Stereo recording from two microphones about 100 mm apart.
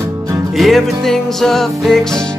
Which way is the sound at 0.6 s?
Centre (ahead or behind).